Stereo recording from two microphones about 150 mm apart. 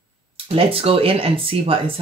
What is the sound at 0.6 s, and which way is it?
Speech, 40° right (ahead or behind).